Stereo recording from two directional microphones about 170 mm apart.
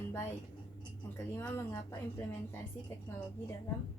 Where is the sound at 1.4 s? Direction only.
15° left (ahead or behind).